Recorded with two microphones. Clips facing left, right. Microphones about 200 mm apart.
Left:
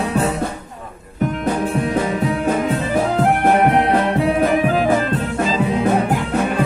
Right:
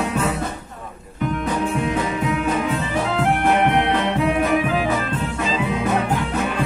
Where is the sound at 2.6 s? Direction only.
40° left (ahead or behind).